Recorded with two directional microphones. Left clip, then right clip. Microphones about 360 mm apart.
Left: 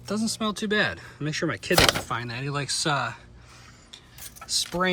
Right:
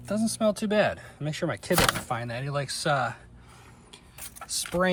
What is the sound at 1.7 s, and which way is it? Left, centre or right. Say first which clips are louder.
Speech: left 4 dB; centre.